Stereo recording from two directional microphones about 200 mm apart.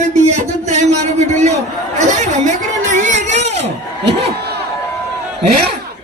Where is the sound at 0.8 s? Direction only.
35° right (ahead or behind).